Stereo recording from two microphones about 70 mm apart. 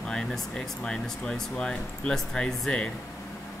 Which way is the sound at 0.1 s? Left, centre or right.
Centre.